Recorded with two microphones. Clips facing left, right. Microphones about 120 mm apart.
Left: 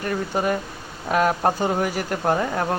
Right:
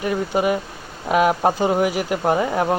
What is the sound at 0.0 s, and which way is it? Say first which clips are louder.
Speech: right 3 dB; 10° right (ahead or behind).